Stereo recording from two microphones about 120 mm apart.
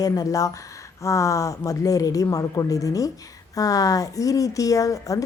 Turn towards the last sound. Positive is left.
turn(degrees=30)  # may be behind; listen again after turning